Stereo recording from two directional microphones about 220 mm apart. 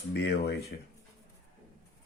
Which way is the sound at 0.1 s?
50° left (ahead or behind).